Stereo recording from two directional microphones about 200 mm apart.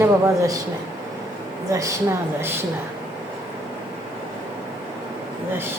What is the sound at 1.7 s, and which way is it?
Speech, 15° right (ahead or behind).